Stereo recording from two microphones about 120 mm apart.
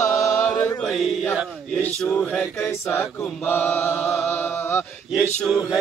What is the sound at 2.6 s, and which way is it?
Chant, 20° left (ahead or behind).